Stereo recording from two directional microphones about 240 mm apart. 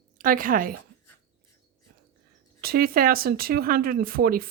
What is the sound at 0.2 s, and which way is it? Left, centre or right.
Speech, right.